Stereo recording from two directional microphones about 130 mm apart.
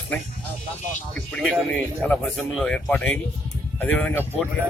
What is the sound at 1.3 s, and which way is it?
A man's voice, 5° left (ahead or behind).